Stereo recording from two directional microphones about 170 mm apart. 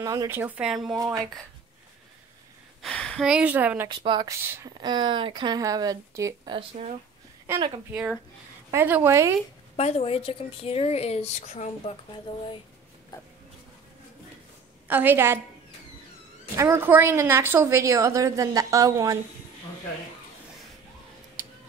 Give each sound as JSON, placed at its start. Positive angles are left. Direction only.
{"t": 0.0, "sound": "a woman's voice", "side_deg": -20}
{"t": 0.9, "sound": "speech", "side_deg": -20}
{"t": 2.8, "sound": "a woman's voice", "side_deg": 5}
{"t": 3.9, "sound": "speech", "side_deg": -25}
{"t": 4.4, "sound": "a woman's voice", "side_deg": -15}
{"t": 4.8, "sound": "speech", "side_deg": -25}
{"t": 6.5, "sound": "speech", "side_deg": -35}
{"t": 8.7, "sound": "a woman's voice", "side_deg": -10}
{"t": 9.8, "sound": "speech", "side_deg": 40}
{"t": 13.1, "sound": "a sound", "side_deg": 20}
{"t": 14.9, "sound": "a woman's voice", "side_deg": -10}
{"t": 16.5, "sound": "a woman's voice", "side_deg": -15}